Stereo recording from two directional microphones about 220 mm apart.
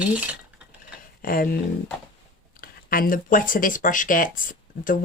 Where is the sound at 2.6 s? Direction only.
40° left (ahead or behind).